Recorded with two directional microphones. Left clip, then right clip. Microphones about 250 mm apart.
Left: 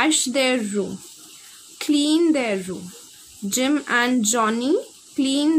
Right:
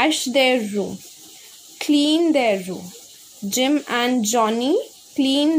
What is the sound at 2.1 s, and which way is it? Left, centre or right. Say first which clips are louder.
Speech: right 2 dB; centre.